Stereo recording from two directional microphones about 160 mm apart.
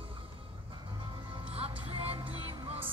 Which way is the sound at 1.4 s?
35° right (ahead or behind).